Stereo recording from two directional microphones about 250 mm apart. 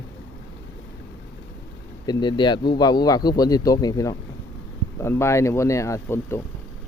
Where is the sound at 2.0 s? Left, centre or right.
Centre.